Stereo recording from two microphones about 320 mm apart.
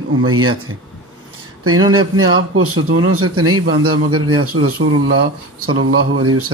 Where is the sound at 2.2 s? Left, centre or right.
Right.